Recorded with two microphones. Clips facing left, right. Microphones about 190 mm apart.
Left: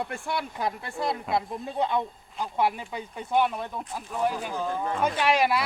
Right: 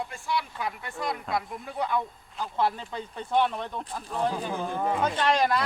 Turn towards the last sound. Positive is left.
turn(degrees=10)  # may be behind; listen again after turning